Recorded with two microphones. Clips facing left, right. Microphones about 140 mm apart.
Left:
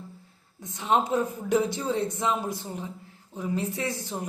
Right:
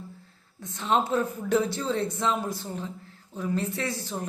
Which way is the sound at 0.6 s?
15° left (ahead or behind).